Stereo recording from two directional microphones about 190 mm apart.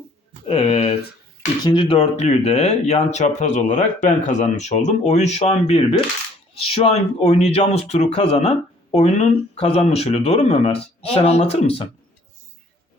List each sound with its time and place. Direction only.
0.4 s speech: 30° left (ahead or behind)